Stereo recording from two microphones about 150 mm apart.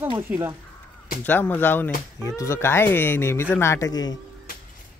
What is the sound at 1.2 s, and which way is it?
Speech, 15° left (ahead or behind).